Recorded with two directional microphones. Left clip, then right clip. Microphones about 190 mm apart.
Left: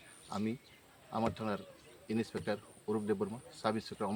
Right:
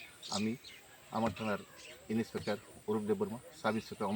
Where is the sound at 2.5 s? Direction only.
15° left (ahead or behind).